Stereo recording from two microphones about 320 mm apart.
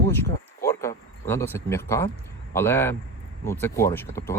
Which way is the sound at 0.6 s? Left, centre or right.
Centre.